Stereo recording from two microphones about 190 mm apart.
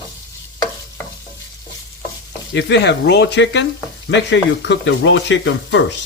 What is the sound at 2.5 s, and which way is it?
Speech, 65° left (ahead or behind).